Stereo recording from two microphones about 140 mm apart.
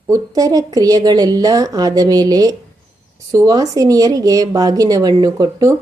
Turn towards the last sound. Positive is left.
turn(degrees=-25)  # may be behind; listen again after turning